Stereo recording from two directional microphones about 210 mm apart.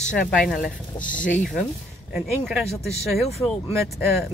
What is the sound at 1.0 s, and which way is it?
Speech, 40° left (ahead or behind).